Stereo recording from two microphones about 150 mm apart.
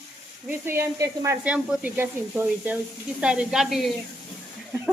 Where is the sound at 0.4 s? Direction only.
15° right (ahead or behind).